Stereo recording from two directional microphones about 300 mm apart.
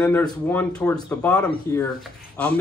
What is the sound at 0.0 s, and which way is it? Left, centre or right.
Speech, centre.